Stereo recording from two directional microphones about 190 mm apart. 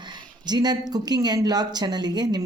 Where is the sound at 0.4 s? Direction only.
20° right (ahead or behind).